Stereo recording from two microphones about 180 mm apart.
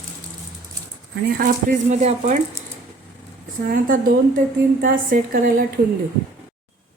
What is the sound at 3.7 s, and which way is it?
A woman's voice, 55° right (ahead or behind).